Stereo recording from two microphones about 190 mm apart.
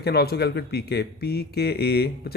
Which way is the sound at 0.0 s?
55° left (ahead or behind).